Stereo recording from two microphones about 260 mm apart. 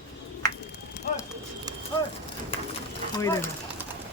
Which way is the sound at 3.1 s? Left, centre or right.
Centre.